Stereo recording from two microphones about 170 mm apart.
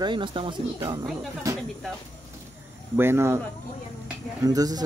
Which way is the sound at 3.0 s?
15° right (ahead or behind).